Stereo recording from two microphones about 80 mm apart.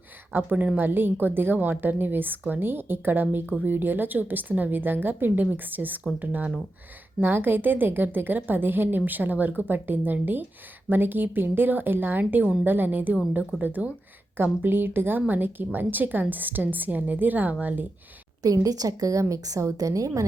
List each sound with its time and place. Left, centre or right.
0.3 s a woman's voice: right
18.4 s a woman's voice: right